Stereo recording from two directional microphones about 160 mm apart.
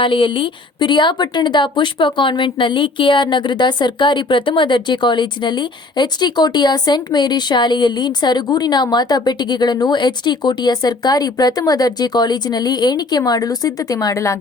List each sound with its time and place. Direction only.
0.0 s speech: 30° left (ahead or behind)